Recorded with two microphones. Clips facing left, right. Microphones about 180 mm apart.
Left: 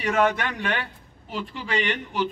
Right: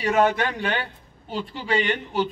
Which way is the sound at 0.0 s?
35° right (ahead or behind).